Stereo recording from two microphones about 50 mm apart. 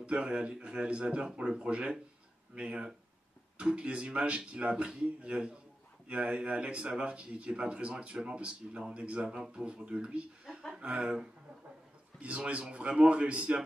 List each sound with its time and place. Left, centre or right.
0.1 s speech: centre
12.2 s speech: right